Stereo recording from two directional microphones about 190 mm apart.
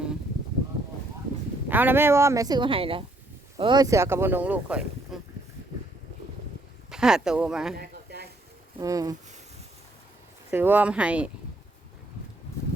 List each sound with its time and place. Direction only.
1.6 s speech: 10° right (ahead or behind)
6.9 s speech: 5° right (ahead or behind)
7.8 s a sound: 55° right (ahead or behind)
8.8 s speech: 20° right (ahead or behind)
10.5 s speech: 10° right (ahead or behind)